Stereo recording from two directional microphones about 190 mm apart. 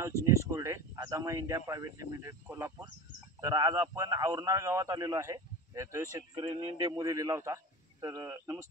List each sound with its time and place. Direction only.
0.0 s a man's voice: 15° right (ahead or behind)